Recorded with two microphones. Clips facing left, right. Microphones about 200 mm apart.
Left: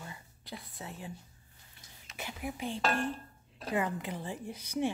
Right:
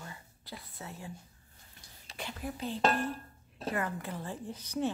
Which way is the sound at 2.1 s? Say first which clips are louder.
Even; 10° left (ahead or behind).